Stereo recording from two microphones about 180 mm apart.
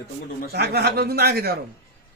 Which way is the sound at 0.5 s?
65° right (ahead or behind).